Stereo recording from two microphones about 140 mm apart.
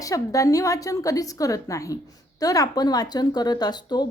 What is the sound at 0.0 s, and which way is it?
A woman's voice, 25° left (ahead or behind).